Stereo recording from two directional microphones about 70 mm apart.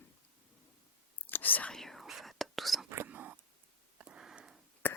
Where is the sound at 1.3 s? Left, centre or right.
Left.